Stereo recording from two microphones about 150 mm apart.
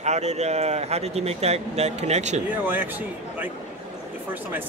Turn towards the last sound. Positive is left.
turn(degrees=-10)  # may be behind; listen again after turning